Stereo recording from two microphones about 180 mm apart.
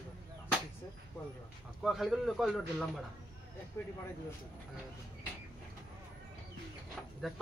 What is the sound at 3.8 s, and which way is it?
Speech, 15° left (ahead or behind).